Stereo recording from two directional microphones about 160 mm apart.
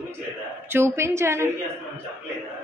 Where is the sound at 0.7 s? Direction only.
15° right (ahead or behind).